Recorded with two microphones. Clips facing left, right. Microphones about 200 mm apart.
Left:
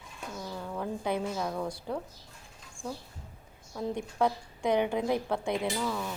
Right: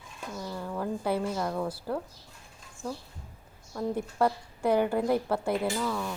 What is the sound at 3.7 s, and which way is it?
A woman's voice, 5° right (ahead or behind).